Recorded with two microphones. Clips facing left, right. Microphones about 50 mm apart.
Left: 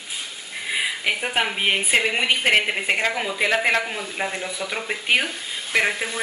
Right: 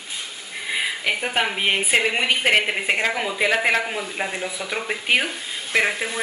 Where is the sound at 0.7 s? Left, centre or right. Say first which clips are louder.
Even; centre.